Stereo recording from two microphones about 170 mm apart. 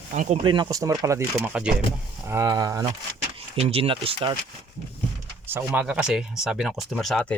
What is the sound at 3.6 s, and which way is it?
Speech, 35° right (ahead or behind).